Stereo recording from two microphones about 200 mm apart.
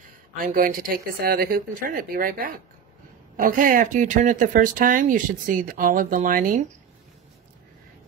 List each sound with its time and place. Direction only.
0.0 s speech: 45° right (ahead or behind)